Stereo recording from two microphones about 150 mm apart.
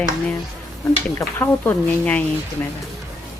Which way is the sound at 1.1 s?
15° left (ahead or behind).